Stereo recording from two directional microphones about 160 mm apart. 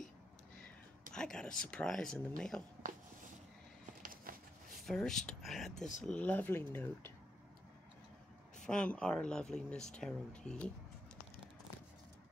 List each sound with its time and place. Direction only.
1.1 s speech: 5° left (ahead or behind)
4.0 s a sound: 60° right (ahead or behind)
4.7 s speech: 5° left (ahead or behind)
8.6 s speech: 5° left (ahead or behind)